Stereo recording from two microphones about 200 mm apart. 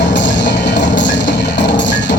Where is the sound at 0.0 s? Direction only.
60° left (ahead or behind).